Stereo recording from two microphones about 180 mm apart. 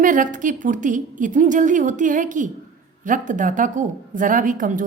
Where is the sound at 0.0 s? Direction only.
45° right (ahead or behind).